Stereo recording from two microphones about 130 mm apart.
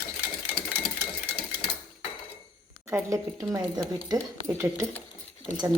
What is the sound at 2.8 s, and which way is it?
Speech, 25° right (ahead or behind).